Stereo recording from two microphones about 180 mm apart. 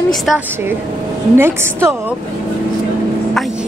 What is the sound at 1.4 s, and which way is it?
Speech, 15° right (ahead or behind).